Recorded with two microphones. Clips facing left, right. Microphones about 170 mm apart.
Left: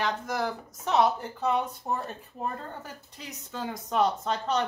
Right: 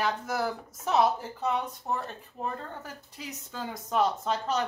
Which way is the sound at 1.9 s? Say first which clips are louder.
Right 2 dB; 15° left (ahead or behind).